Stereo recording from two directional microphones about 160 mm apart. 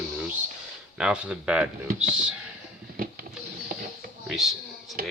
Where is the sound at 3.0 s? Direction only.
65° right (ahead or behind).